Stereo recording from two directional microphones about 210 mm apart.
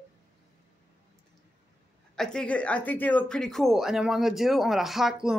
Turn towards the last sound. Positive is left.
turn(degrees=0)  # may be behind; listen again after turning